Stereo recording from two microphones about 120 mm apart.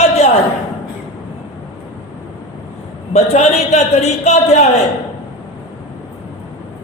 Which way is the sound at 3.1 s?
70° left (ahead or behind).